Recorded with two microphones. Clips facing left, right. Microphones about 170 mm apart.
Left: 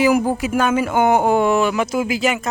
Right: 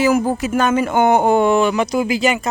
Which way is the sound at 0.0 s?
10° left (ahead or behind).